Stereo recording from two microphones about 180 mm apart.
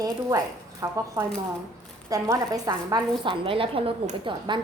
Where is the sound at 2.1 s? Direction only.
20° right (ahead or behind).